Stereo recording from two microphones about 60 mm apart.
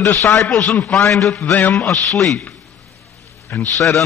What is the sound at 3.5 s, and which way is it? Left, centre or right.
Speech, left.